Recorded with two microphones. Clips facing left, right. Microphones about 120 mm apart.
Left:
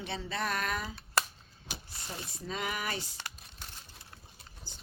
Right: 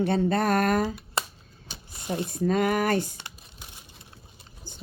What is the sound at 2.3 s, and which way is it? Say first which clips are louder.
Speech: right 13 dB; 50° right (ahead or behind).